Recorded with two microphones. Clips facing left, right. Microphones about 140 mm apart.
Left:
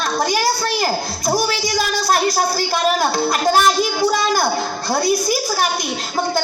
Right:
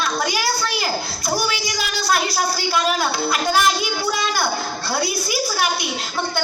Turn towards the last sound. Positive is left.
turn(degrees=45)  # may be behind; listen again after turning